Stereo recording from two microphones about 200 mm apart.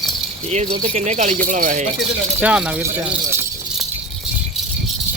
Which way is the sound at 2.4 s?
5° right (ahead or behind).